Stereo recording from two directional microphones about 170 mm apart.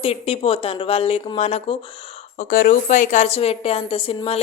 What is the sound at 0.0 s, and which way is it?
A woman's voice, 35° left (ahead or behind).